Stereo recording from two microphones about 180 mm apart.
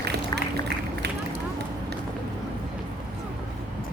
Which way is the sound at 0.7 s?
70° right (ahead or behind).